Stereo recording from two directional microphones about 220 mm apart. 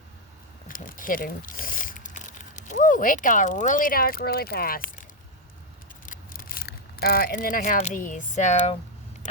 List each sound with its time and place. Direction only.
0.7 s speech: 40° left (ahead or behind)
6.1 s speech: 40° left (ahead or behind)